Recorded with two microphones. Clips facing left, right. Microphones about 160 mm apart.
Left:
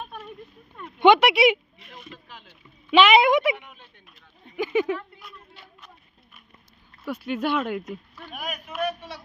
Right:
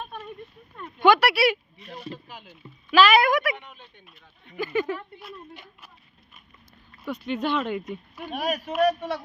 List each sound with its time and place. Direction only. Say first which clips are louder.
0.9 s speech: left 3 dB; 20° left (ahead or behind)
1.8 s a sound: right 7 dB; 35° right (ahead or behind)
2.1 s speech: right 4 dB; 10° right (ahead or behind)
2.9 s a woman's voice: left 2 dB; 20° left (ahead or behind)
3.5 s speech: left 3 dB; 5° left (ahead or behind)
4.5 s speech: left 3 dB; 15° left (ahead or behind)
7.1 s speech: left 1 dB; 5° left (ahead or behind)
8.3 s a man's voice: right 7 dB; 35° right (ahead or behind)